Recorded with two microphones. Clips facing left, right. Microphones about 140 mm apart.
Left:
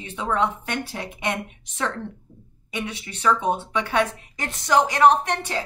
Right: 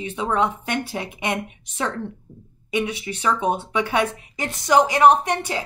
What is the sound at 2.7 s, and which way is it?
A woman's voice, 15° right (ahead or behind).